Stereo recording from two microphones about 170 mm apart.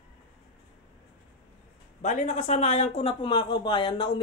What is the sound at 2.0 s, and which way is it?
A man's voice, 45° left (ahead or behind).